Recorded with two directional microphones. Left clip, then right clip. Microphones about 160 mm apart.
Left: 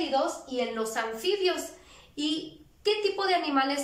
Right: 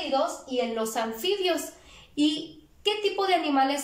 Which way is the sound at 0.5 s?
15° right (ahead or behind).